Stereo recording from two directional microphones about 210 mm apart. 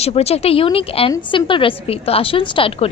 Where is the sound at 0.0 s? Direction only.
30° left (ahead or behind).